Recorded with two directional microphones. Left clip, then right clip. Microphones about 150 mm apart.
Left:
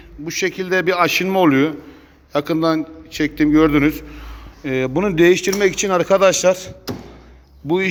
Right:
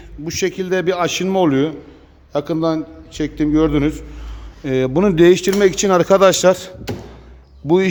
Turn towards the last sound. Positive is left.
turn(degrees=-45)  # may be behind; listen again after turning